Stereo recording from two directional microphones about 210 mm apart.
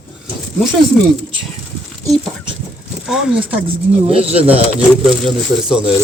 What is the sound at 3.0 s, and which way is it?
Speech, 5° right (ahead or behind).